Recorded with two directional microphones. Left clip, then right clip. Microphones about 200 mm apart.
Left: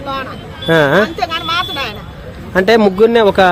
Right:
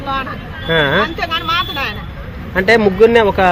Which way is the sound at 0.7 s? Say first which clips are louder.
Left 3 dB; 50° left (ahead or behind).